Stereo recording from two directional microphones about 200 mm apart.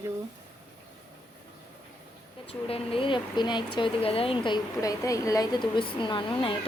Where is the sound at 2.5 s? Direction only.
30° left (ahead or behind).